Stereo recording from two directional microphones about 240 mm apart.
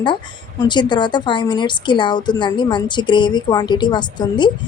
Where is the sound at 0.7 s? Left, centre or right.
Centre.